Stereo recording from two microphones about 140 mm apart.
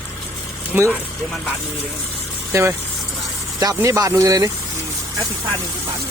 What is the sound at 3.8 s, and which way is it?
Speech, 25° right (ahead or behind).